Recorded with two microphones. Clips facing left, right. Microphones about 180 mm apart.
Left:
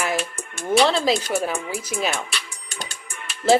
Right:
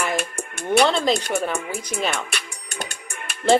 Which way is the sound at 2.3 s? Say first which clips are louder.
Right 2 dB; 55° right (ahead or behind).